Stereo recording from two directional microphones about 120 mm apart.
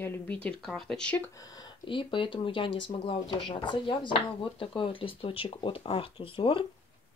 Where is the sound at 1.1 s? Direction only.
15° left (ahead or behind).